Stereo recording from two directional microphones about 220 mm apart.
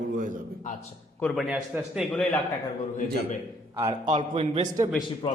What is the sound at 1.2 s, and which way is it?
A man's voice, 5° left (ahead or behind).